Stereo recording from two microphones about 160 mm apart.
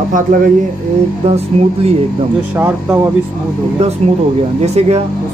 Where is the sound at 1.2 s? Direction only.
40° right (ahead or behind).